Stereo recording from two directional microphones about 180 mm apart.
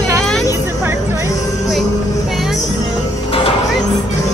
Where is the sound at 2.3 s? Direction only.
Centre (ahead or behind).